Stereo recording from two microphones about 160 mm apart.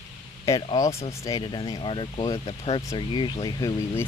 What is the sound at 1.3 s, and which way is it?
Speech, 30° left (ahead or behind).